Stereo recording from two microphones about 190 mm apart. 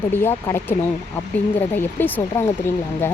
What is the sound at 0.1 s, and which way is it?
Speech, 10° left (ahead or behind).